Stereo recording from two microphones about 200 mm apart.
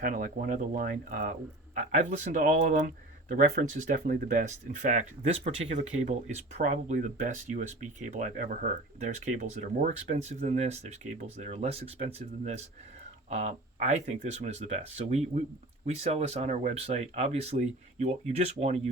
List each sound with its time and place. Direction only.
0.0 s speech: 45° right (ahead or behind)